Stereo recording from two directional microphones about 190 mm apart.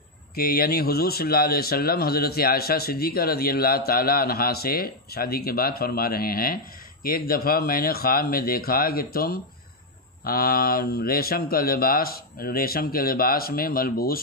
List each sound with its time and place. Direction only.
0.4 s speech: 50° left (ahead or behind)